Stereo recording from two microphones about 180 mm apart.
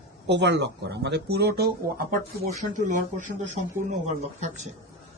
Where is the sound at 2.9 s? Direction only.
45° right (ahead or behind).